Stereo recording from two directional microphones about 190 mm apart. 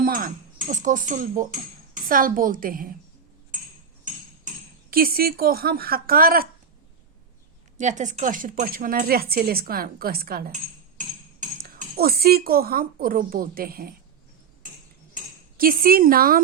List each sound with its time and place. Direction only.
0.0 s a woman's voice: 50° right (ahead or behind)
4.9 s a woman's voice: 50° right (ahead or behind)
7.8 s a woman's voice: 40° right (ahead or behind)
15.5 s a woman's voice: 50° right (ahead or behind)